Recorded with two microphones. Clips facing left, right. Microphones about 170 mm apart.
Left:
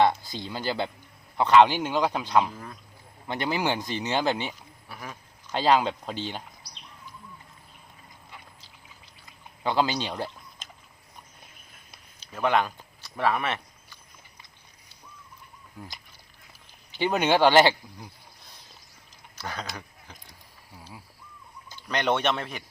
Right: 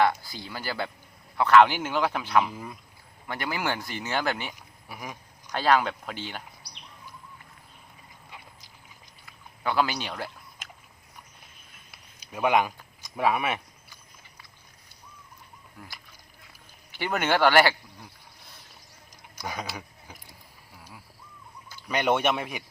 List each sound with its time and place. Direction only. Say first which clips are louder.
0.0 s speech: left 2 dB; 20° left (ahead or behind)
2.5 s speech: right 2 dB; 10° right (ahead or behind)
3.2 s speech: left 3 dB; 25° left (ahead or behind)
4.9 s speech: right 1 dB; 10° right (ahead or behind)
5.5 s speech: left 1 dB; 20° left (ahead or behind)
9.6 s speech: left 1 dB; 20° left (ahead or behind)
12.2 s speech: right 1 dB; 10° right (ahead or behind)
13.0 s a sound: right 1 dB; 10° right (ahead or behind)
15.8 s speech: left 4 dB; 20° left (ahead or behind)
17.0 s speech: left 2 dB; 15° left (ahead or behind)
19.4 s speech: right 1 dB; 10° right (ahead or behind)
21.8 s speech: right 1 dB; 10° right (ahead or behind)